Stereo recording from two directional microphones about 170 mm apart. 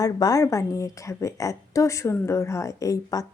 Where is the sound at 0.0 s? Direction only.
20° left (ahead or behind).